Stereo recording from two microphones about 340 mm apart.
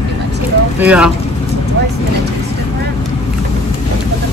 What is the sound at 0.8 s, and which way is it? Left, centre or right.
Speech, centre.